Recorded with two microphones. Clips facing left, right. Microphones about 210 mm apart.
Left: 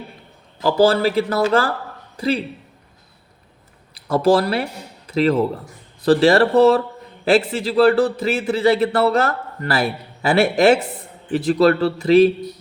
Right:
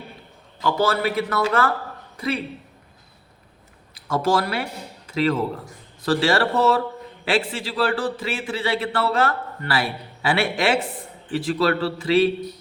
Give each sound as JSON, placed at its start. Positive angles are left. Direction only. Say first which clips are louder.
{"t": 0.6, "sound": "a man's voice", "louder": "left 6 dB", "side_deg": 30}
{"t": 4.1, "sound": "a man's voice", "louder": "left 6 dB", "side_deg": 35}